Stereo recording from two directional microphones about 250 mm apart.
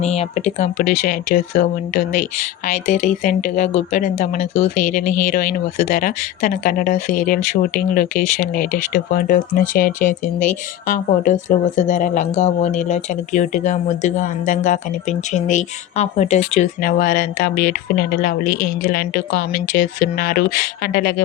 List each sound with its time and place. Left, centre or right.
0.0 s speech: left
18.4 s speech: left
18.8 s speech: left